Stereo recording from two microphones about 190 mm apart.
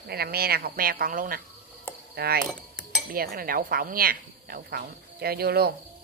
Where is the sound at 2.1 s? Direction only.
55° right (ahead or behind).